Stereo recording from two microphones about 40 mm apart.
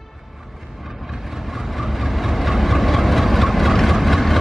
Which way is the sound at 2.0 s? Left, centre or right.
Centre.